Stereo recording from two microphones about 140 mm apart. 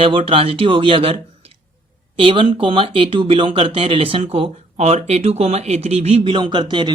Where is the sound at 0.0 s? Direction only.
40° right (ahead or behind).